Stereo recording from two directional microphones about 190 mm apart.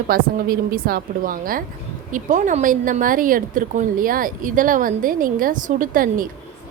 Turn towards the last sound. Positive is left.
turn(degrees=-45)  # may be behind; listen again after turning